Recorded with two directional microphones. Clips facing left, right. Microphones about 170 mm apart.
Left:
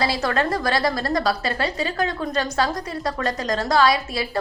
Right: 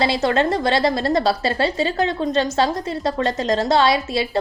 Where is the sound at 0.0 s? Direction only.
25° right (ahead or behind).